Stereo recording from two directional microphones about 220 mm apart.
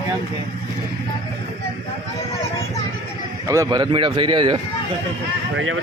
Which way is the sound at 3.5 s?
15° right (ahead or behind).